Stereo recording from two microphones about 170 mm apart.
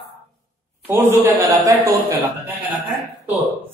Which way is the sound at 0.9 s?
20° right (ahead or behind).